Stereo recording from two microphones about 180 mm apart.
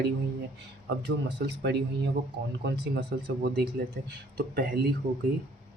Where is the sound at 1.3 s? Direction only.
70° right (ahead or behind).